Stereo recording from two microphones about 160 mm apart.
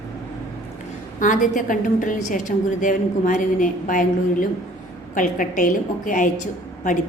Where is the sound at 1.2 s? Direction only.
55° left (ahead or behind).